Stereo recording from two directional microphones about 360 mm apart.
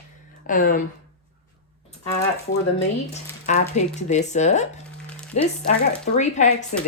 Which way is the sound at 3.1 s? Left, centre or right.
Centre.